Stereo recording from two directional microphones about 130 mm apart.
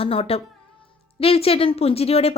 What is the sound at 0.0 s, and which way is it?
Speech, 45° left (ahead or behind).